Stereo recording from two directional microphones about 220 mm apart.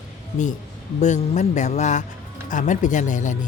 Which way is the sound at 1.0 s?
35° left (ahead or behind).